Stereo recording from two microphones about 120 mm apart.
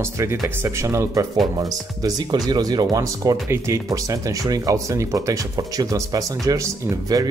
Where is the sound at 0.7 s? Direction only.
25° right (ahead or behind).